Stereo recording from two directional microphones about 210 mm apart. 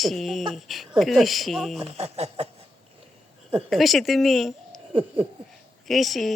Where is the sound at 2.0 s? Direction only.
30° right (ahead or behind).